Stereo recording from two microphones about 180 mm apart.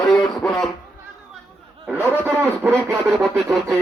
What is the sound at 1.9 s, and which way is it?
Speech, 10° right (ahead or behind).